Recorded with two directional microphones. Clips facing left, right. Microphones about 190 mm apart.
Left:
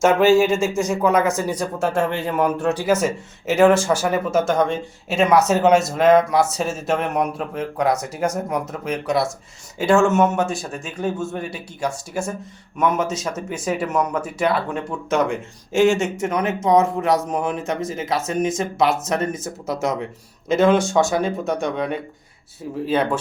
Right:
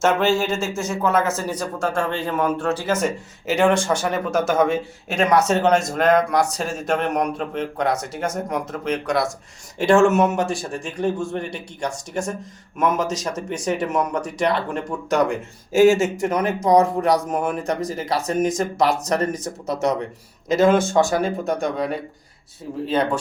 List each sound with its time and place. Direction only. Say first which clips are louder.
0.0 s speech: left 4 dB; 15° left (ahead or behind)
20.5 s speech: even; 45° right (ahead or behind)
20.9 s speech: even; centre (ahead or behind)